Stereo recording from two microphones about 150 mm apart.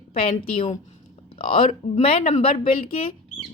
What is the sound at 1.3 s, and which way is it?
A woman's voice, 40° left (ahead or behind).